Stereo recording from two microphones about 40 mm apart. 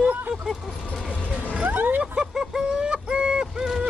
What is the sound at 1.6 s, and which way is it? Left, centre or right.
Vehicle, right.